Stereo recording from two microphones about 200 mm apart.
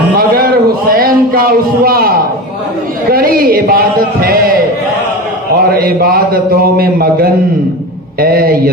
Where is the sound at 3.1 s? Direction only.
45° right (ahead or behind).